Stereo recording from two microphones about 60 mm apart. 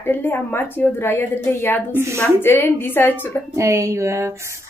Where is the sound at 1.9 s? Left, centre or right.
Right.